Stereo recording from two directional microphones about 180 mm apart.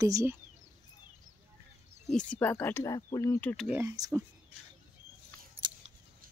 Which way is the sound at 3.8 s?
15° right (ahead or behind).